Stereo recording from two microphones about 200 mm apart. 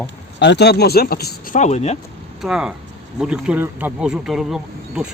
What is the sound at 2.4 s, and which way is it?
Speech, 5° right (ahead or behind).